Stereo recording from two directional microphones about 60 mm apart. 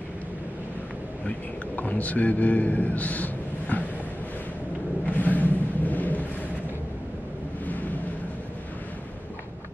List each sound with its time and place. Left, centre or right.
1.8 s a man's voice: left
5.0 s thunder: left
7.6 s vehicle: left